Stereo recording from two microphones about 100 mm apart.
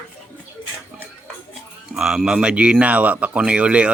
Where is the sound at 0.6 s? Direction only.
55° left (ahead or behind).